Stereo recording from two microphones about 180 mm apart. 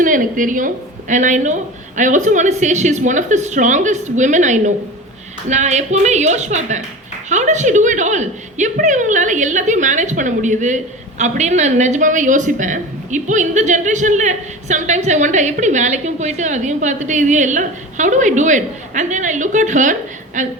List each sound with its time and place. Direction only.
0.0 s a woman's voice: 50° right (ahead or behind)